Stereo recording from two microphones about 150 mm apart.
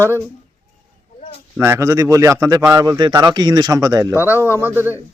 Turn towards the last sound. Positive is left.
turn(degrees=15)  # may be behind; listen again after turning